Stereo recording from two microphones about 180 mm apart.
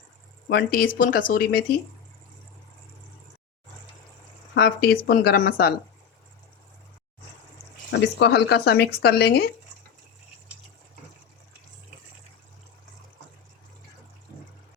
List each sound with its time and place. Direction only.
0.4 s speech: 55° left (ahead or behind)
4.5 s speech: 60° left (ahead or behind)
7.9 s speech: 70° left (ahead or behind)